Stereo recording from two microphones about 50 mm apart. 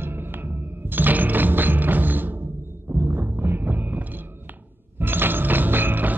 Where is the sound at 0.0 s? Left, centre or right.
Right.